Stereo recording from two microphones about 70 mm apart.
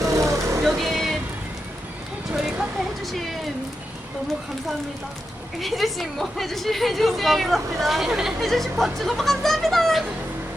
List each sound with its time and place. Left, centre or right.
0.0 s vehicle: right
0.6 s vehicle: centre
2.3 s a sound: centre
5.5 s a woman's voice: centre